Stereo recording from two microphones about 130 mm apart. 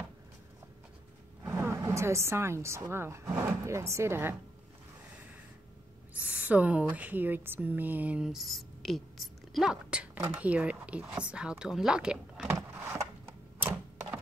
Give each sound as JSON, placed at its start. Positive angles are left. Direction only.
{"t": 1.4, "sound": "speech", "side_deg": -20}
{"t": 6.1, "sound": "speech", "side_deg": -10}
{"t": 12.4, "sound": "a sound", "side_deg": -20}
{"t": 13.6, "sound": "typewriter", "side_deg": -15}